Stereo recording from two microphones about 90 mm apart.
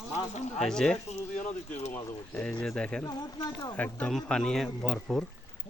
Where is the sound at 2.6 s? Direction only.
5° left (ahead or behind).